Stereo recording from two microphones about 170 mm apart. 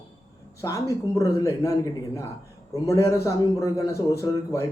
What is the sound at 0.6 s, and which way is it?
A man's voice, 20° left (ahead or behind).